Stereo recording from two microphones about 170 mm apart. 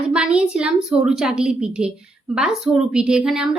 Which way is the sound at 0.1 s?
5° right (ahead or behind).